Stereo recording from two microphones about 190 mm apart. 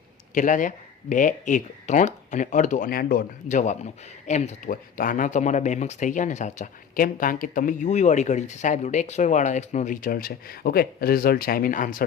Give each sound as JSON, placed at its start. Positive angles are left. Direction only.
{"t": 0.3, "sound": "speech", "side_deg": 45}